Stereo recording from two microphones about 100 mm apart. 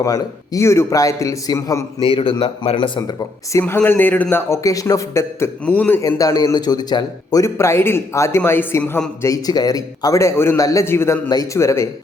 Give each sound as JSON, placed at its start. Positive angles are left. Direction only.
{"t": 0.0, "sound": "a man's voice", "side_deg": 30}
{"t": 2.0, "sound": "a man's voice", "side_deg": 60}
{"t": 3.8, "sound": "a man's voice", "side_deg": 20}
{"t": 5.6, "sound": "a man's voice", "side_deg": 15}
{"t": 6.0, "sound": "a man's voice", "side_deg": 35}
{"t": 9.2, "sound": "a man's voice", "side_deg": 40}